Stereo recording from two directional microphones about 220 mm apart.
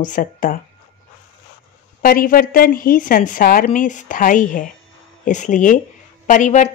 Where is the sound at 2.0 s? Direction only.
40° left (ahead or behind).